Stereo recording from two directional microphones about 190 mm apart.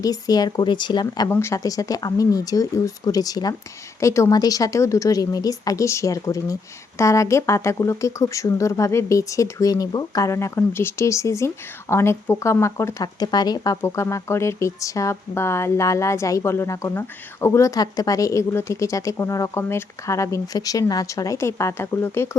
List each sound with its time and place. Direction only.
0.0 s speech: 20° left (ahead or behind)